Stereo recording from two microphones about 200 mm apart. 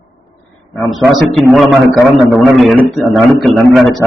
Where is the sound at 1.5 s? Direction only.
Centre (ahead or behind).